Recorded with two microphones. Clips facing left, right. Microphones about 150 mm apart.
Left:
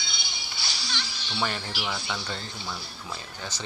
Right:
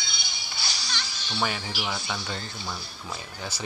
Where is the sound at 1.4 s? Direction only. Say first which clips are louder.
Right 1 dB; 5° right (ahead or behind).